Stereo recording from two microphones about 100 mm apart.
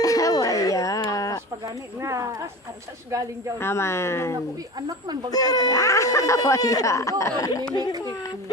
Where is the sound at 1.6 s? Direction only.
30° right (ahead or behind).